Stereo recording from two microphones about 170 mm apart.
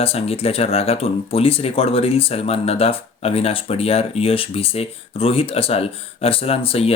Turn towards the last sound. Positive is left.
turn(degrees=35)  # may be behind; listen again after turning